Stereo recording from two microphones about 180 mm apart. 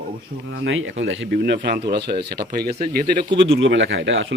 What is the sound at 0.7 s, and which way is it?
Speech, 90° right.